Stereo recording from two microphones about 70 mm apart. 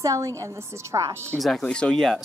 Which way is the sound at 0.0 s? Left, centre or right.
Right.